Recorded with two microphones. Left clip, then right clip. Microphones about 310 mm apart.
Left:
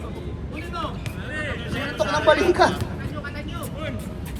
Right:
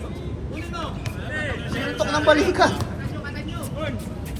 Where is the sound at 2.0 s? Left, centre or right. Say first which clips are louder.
Even; left.